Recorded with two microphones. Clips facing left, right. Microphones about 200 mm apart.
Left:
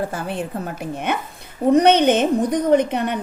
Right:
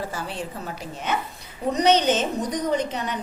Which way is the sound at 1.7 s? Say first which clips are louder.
Left 6 dB; 55° left (ahead or behind).